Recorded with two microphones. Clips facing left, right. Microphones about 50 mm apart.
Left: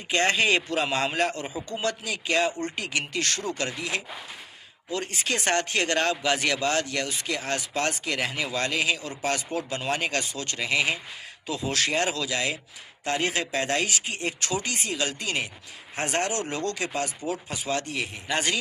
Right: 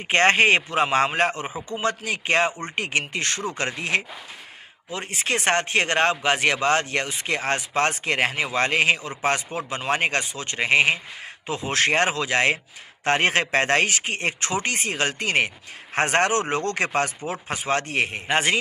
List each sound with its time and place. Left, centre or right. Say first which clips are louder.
0.1 s speech: right 5 dB; right
2.5 s speech: right 3 dB; right
4.9 s speech: right 2 dB; right
18.3 s speech: right 4 dB; right